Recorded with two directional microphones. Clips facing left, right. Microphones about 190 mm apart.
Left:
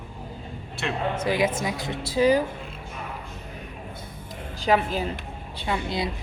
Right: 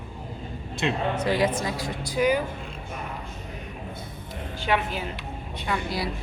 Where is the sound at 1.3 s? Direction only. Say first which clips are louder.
Even; 15° left (ahead or behind); by 2.4 s 30° left (ahead or behind).